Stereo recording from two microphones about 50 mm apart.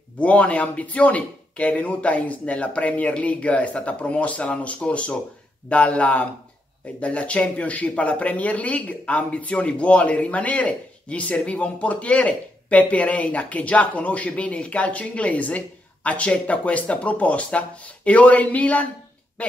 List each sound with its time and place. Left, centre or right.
0.2 s speech: left